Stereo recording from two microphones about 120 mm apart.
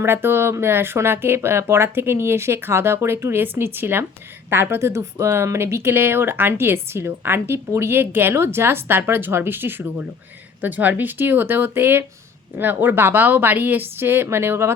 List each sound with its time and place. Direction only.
0.0 s speech: 20° right (ahead or behind)